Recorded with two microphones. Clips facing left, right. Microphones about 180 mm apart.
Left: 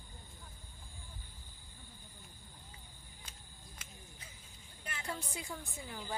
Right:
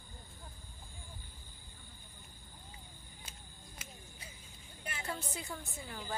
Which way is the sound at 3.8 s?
10° right (ahead or behind).